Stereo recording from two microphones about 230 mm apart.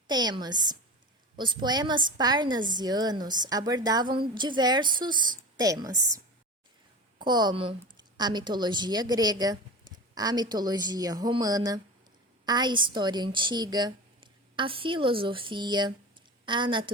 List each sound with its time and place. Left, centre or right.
0.1 s a woman's voice: centre